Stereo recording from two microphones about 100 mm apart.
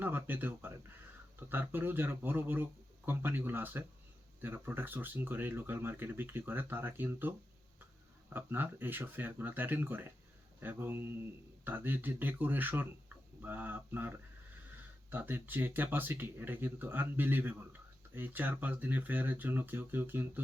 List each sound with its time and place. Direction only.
0.0 s speech: 20° right (ahead or behind)